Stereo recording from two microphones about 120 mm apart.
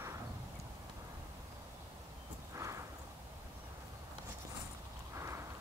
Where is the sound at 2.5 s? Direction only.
25° right (ahead or behind).